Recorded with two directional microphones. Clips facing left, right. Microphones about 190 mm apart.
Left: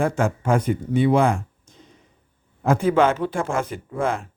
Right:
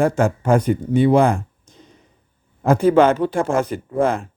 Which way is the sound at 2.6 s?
35° right (ahead or behind).